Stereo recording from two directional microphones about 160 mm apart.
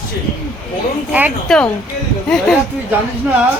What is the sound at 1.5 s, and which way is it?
Speech, 5° left (ahead or behind).